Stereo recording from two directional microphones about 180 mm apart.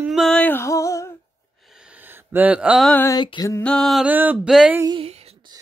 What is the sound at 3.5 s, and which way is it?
Music, 5° left (ahead or behind).